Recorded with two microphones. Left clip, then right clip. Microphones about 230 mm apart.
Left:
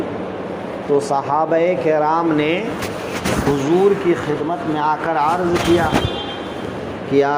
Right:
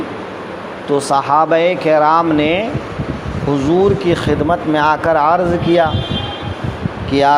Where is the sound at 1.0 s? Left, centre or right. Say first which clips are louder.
Right 8 dB; right.